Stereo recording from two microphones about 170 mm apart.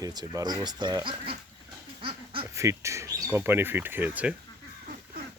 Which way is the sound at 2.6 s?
15° right (ahead or behind).